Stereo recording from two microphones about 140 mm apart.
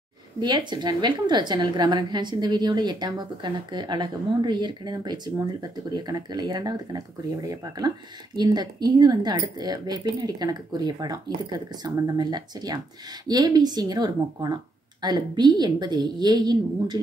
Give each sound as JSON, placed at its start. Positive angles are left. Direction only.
{"t": 0.4, "sound": "a woman's voice", "side_deg": -30}